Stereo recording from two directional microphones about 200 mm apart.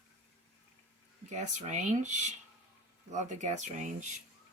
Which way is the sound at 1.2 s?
35° right (ahead or behind).